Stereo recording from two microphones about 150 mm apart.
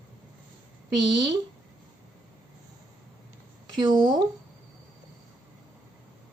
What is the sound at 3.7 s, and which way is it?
Speech, 30° right (ahead or behind).